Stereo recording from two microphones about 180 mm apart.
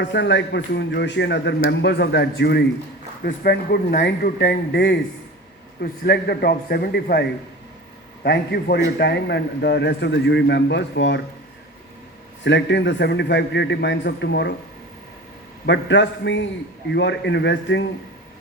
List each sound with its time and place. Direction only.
0.0 s a man's voice: 75° left (ahead or behind)
12.5 s a man's voice: 80° left
15.6 s a man's voice: 75° left (ahead or behind)